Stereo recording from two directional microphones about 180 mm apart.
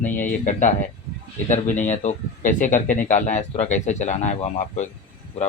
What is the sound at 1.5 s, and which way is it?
Speech, 45° left (ahead or behind).